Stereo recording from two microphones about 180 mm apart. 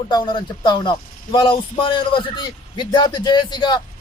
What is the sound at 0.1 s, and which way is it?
Speech, 25° left (ahead or behind).